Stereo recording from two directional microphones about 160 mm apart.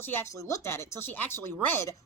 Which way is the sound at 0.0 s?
15° left (ahead or behind).